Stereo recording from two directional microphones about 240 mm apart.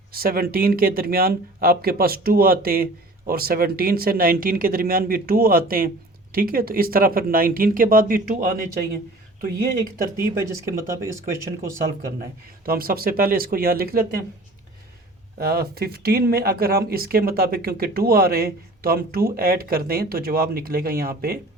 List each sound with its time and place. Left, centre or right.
0.1 s speech: right
10.4 s speech: centre
12.6 s speech: right
15.4 s speech: right